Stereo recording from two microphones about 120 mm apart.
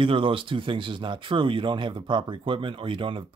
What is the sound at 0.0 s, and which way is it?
Speech, 45° right (ahead or behind).